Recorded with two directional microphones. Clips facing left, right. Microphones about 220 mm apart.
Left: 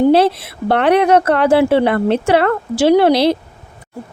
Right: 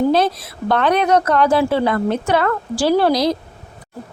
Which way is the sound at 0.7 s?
65° left (ahead or behind).